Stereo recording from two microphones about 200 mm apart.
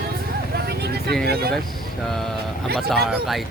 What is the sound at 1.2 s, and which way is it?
Speech, 50° right (ahead or behind).